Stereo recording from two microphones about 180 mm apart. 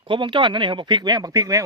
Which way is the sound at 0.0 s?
25° right (ahead or behind).